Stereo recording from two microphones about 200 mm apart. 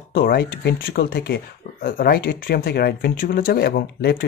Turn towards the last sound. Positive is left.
turn(degrees=50)  # may be behind; listen again after turning